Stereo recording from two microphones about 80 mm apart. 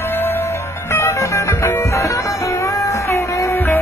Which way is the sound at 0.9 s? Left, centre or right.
Left.